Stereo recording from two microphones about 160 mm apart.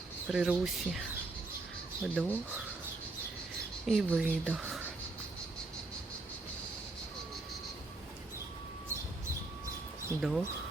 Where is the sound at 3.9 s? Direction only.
Centre (ahead or behind).